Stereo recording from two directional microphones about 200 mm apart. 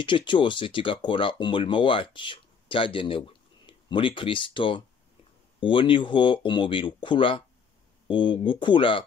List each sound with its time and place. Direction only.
0.0 s speech: 25° left (ahead or behind)